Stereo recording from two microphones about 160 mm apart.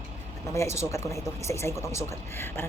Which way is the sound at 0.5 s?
20° left (ahead or behind).